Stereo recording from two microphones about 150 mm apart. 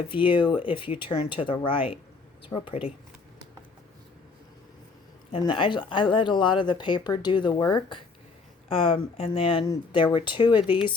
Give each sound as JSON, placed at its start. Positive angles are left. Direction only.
{"t": 0.1, "sound": "speech", "side_deg": 35}
{"t": 5.4, "sound": "speech", "side_deg": 35}